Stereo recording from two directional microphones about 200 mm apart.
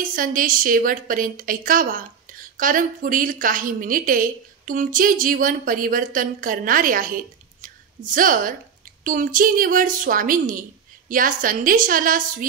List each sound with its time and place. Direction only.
0.0 s a woman's voice: 45° right (ahead or behind)
7.6 s a sound: 40° right (ahead or behind)
9.0 s a woman's voice: 40° right (ahead or behind)